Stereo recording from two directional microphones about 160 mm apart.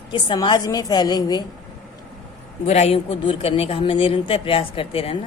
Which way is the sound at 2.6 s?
40° left (ahead or behind).